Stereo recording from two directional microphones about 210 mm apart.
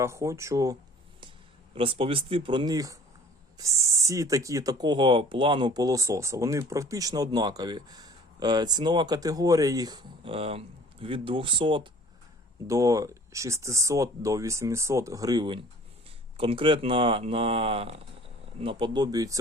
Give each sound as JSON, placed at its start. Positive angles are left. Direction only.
{"t": 0.0, "sound": "speech", "side_deg": -15}